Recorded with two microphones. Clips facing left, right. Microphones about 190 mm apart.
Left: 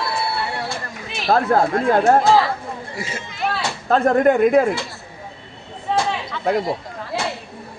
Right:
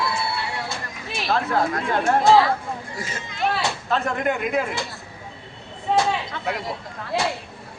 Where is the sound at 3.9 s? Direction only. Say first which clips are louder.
Left 10 dB; 45° left (ahead or behind).